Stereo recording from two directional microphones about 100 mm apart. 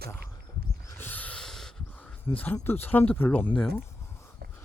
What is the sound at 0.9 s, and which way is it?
Snort, 20° left (ahead or behind).